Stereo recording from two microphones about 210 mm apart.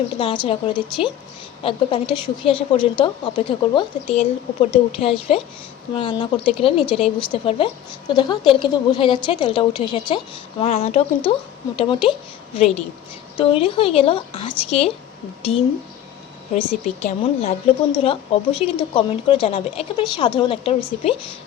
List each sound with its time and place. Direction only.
0.2 s speech: 25° left (ahead or behind)